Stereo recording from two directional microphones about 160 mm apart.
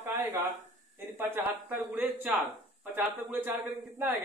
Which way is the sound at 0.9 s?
15° right (ahead or behind).